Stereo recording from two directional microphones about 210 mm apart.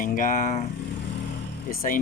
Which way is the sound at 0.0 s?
40° left (ahead or behind).